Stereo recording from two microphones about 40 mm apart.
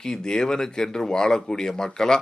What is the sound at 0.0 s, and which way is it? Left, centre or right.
Speech, centre.